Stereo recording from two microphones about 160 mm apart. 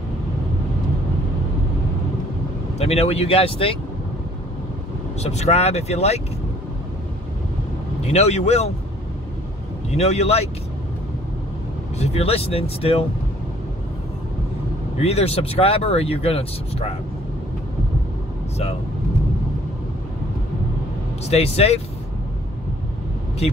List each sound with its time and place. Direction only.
2.8 s speech: 40° left (ahead or behind)
5.2 s speech: 40° left (ahead or behind)
8.1 s speech: 45° left (ahead or behind)
9.8 s speech: 40° left (ahead or behind)
12.0 s speech: 40° left (ahead or behind)
15.0 s speech: 40° left (ahead or behind)
21.3 s speech: 40° left (ahead or behind)